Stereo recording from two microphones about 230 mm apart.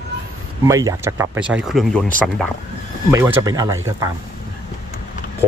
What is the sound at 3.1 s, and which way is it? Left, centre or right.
Speech, centre.